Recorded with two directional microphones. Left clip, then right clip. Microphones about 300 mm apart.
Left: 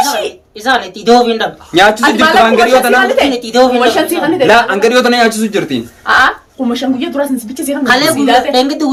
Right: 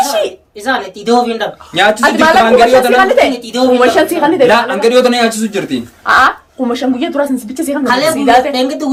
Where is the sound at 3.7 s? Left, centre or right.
Centre.